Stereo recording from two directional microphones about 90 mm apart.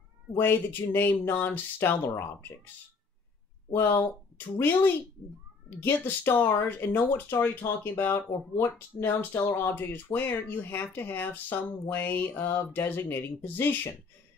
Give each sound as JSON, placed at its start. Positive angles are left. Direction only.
{"t": 0.4, "sound": "speech", "side_deg": 25}
{"t": 3.7, "sound": "speech", "side_deg": 30}